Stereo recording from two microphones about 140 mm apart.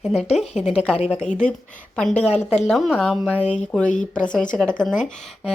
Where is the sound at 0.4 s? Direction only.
50° left (ahead or behind).